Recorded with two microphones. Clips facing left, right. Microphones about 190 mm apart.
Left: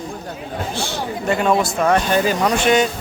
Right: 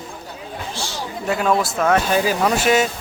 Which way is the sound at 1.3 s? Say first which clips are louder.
Left 2 dB; centre (ahead or behind).